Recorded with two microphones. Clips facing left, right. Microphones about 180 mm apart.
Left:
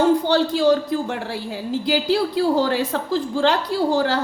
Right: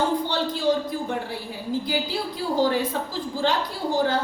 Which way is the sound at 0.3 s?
80° left.